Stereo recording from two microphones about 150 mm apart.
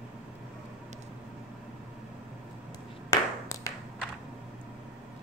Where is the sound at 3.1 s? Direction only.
25° left (ahead or behind).